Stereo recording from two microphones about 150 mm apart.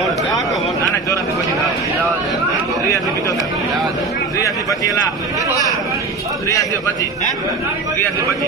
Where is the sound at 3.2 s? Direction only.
25° left (ahead or behind).